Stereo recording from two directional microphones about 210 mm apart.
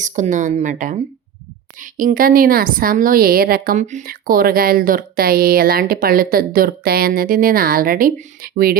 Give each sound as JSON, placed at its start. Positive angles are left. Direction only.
{"t": 0.0, "sound": "a woman's voice", "side_deg": -35}